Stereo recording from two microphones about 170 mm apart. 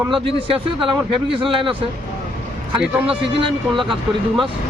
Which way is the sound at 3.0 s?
30° right (ahead or behind).